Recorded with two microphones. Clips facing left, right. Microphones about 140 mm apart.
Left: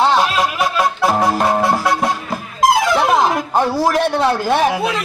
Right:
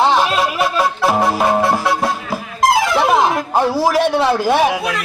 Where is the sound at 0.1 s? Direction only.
Centre (ahead or behind).